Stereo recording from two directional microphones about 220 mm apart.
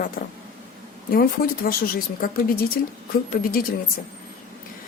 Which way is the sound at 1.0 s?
40° left (ahead or behind).